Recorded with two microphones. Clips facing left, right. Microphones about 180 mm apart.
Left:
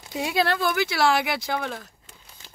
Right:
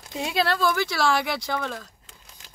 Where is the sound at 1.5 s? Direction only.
20° left (ahead or behind).